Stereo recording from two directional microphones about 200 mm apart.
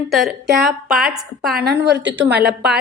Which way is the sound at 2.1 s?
55° right (ahead or behind).